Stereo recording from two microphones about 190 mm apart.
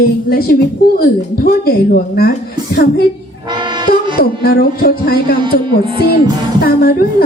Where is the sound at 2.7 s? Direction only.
55° left (ahead or behind).